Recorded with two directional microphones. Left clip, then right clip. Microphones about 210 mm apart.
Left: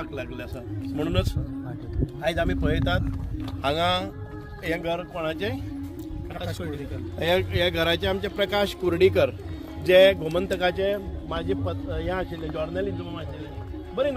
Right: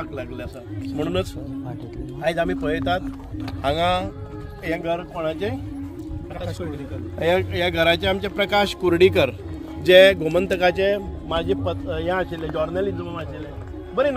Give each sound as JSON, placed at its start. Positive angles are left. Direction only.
{"t": 0.8, "sound": "speech", "side_deg": 0}
{"t": 2.2, "sound": "speech", "side_deg": -5}
{"t": 7.2, "sound": "speech", "side_deg": -10}